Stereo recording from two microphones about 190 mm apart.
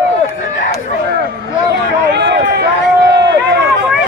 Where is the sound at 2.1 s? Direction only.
65° right (ahead or behind).